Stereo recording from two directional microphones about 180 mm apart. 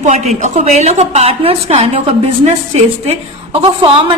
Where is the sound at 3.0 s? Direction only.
30° right (ahead or behind).